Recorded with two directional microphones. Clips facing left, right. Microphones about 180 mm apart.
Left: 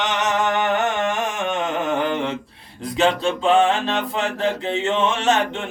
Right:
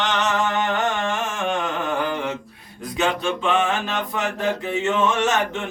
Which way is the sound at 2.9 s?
30° left (ahead or behind).